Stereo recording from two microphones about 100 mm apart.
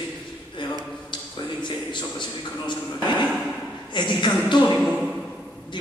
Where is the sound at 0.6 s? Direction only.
50° left (ahead or behind).